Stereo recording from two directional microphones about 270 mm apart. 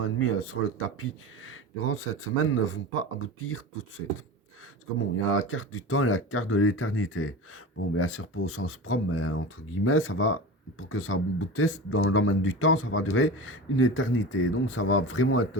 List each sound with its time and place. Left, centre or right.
0.0 s speech: left